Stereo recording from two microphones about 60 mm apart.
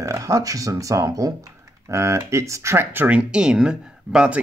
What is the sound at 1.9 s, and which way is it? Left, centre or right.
Speech, right.